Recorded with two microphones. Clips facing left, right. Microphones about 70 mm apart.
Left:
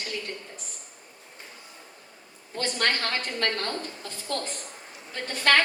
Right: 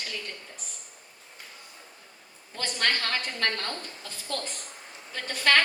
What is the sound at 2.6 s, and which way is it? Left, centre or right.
Speech, left.